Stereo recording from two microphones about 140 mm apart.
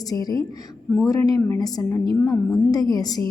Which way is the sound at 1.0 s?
25° left (ahead or behind).